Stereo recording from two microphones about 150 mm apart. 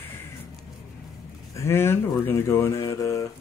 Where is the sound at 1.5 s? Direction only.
15° left (ahead or behind).